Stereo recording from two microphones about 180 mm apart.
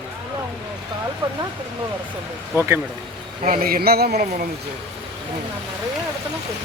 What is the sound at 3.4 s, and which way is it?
Speech, 50° right (ahead or behind).